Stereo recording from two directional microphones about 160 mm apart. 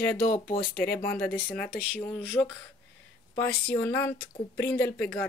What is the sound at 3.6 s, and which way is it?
Speech, 10° left (ahead or behind).